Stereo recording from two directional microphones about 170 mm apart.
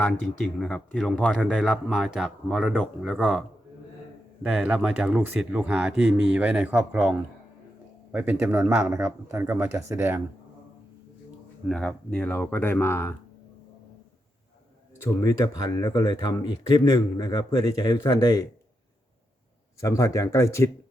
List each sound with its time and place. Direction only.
0.0 s speech: 5° left (ahead or behind)
4.4 s speech: 5° right (ahead or behind)
11.7 s speech: 5° left (ahead or behind)
15.0 s speech: 20° left (ahead or behind)
19.8 s speech: 15° left (ahead or behind)